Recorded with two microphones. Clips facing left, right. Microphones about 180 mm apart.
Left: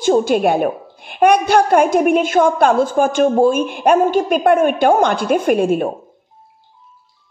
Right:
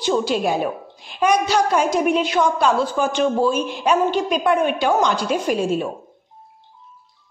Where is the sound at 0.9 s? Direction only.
55° left (ahead or behind).